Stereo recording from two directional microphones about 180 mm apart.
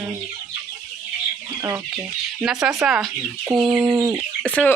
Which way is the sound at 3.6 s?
25° right (ahead or behind).